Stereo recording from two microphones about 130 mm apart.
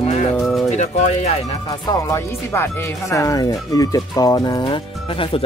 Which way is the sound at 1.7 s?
30° left (ahead or behind).